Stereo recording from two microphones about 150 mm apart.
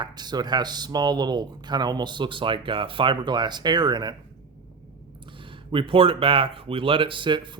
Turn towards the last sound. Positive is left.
turn(degrees=-30)  # may be behind; listen again after turning